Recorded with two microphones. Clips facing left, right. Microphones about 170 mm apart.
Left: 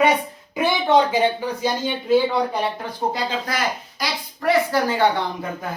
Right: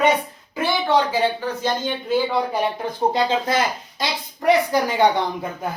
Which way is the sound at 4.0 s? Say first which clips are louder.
Right 2 dB; 15° right (ahead or behind).